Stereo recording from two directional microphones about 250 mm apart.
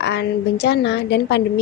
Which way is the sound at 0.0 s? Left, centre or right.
Left.